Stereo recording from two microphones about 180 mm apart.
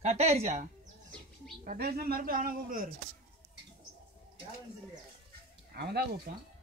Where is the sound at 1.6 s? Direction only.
55° right (ahead or behind).